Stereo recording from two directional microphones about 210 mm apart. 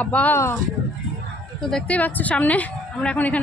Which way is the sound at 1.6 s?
5° left (ahead or behind).